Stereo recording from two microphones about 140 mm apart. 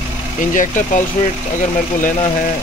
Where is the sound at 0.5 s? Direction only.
65° left (ahead or behind).